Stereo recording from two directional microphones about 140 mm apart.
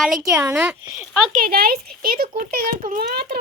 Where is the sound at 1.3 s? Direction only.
90° right.